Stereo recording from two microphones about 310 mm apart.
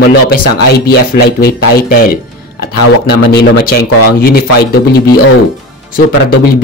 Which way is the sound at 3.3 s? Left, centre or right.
Left.